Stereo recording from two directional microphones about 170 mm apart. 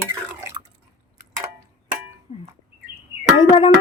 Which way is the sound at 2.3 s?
40° left (ahead or behind).